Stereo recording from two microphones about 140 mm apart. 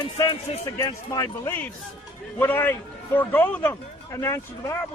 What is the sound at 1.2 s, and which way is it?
A man's voice, 20° left (ahead or behind).